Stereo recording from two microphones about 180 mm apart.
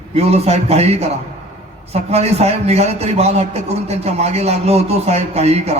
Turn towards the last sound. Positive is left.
turn(degrees=-35)  # may be behind; listen again after turning